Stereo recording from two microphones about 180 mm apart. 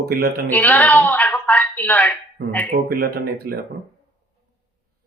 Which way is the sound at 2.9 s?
55° right (ahead or behind).